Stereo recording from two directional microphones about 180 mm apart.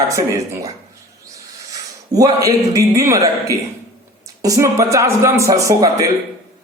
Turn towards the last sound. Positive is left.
turn(degrees=-15)  # may be behind; listen again after turning